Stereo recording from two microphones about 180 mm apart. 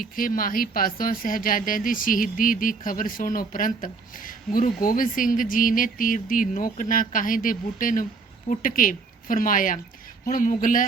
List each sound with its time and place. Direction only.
0.0 s speech: 50° left (ahead or behind)